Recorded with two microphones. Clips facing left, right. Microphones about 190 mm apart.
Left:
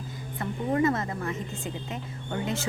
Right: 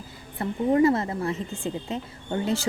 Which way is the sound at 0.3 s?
30° right (ahead or behind).